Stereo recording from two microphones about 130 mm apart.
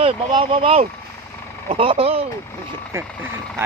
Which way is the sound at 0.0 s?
40° right (ahead or behind).